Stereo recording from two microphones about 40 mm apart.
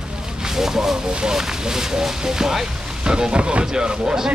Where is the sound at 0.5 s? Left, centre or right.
Centre.